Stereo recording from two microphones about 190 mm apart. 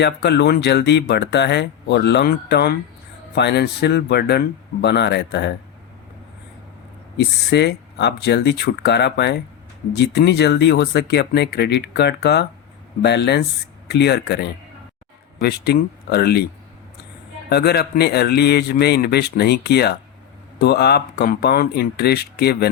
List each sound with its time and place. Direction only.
0.0 s speech: 60° left (ahead or behind)
7.2 s speech: 60° left (ahead or behind)
17.5 s speech: 55° left (ahead or behind)